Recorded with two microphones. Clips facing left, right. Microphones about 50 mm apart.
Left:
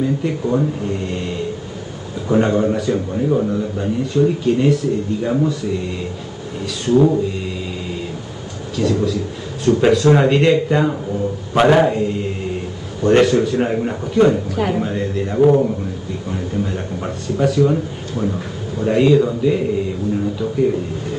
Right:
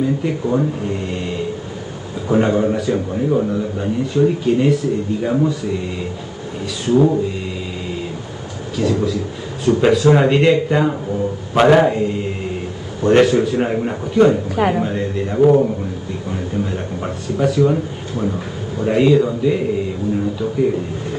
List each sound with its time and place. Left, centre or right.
0.0 s a man's voice: centre
8.7 s a man's voice: centre
14.5 s speech: centre
14.8 s a man's voice: centre